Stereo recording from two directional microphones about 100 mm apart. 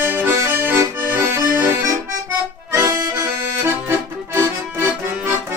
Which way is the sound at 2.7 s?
25° right (ahead or behind).